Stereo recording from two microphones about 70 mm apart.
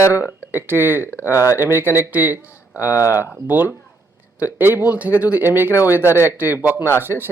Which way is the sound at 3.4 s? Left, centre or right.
Right.